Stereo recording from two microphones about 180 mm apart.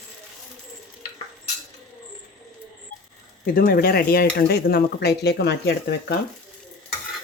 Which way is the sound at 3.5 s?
50° left (ahead or behind).